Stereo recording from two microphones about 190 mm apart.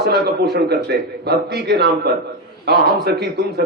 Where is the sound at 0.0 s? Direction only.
60° right (ahead or behind).